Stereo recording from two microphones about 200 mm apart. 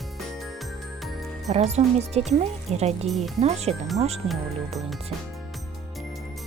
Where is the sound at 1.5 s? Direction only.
35° right (ahead or behind).